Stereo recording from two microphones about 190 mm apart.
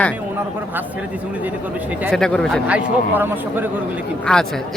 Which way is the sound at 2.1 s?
5° left (ahead or behind).